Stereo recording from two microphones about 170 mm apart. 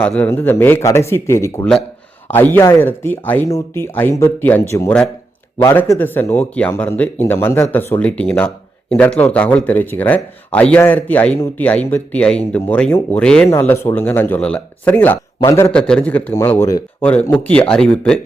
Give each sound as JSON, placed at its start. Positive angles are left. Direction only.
{"t": 0.2, "sound": "speech", "side_deg": 10}
{"t": 15.7, "sound": "speech", "side_deg": 5}